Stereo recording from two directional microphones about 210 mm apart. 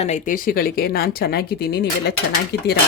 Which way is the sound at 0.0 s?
35° left (ahead or behind).